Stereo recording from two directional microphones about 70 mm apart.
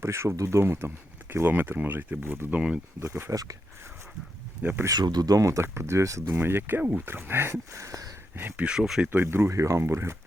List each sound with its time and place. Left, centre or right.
0.0 s speech: right; by 2.8 s centre
3.0 s speech: right
4.9 s speech: right
6.3 s speech: right
8.4 s speech: right
8.6 s speech: centre
9.1 s speech: right